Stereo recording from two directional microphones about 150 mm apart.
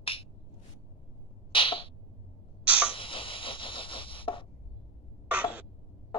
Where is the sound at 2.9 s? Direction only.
35° left (ahead or behind).